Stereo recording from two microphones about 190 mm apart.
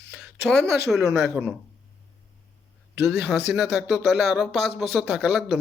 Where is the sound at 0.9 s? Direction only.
Centre (ahead or behind).